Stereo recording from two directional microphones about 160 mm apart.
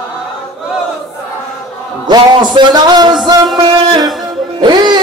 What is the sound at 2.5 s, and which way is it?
Music, 25° right (ahead or behind).